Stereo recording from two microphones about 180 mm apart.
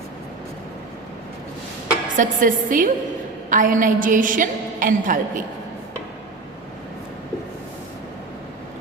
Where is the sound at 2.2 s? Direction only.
50° right (ahead or behind).